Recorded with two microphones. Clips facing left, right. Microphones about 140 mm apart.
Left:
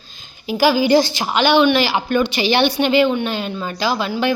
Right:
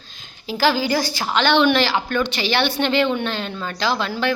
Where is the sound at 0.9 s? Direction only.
25° left (ahead or behind).